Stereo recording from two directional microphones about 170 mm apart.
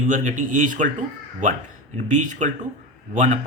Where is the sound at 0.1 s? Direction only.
50° right (ahead or behind).